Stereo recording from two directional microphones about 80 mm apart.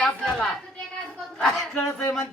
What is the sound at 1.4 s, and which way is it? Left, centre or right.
Speech, centre.